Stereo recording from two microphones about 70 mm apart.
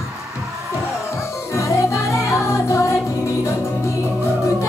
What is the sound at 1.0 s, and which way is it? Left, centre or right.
Music, left.